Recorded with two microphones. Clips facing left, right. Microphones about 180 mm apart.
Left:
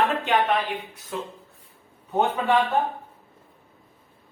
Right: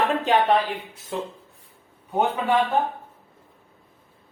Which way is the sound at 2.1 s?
10° right (ahead or behind).